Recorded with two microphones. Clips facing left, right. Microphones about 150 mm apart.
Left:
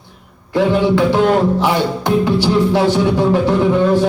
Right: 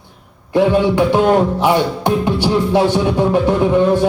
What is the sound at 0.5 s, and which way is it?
Speech, 15° right (ahead or behind).